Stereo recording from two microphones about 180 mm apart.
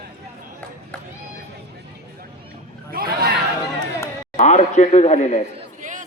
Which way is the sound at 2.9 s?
55° right (ahead or behind).